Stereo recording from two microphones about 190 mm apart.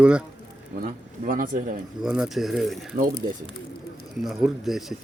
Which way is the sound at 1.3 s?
45° right (ahead or behind).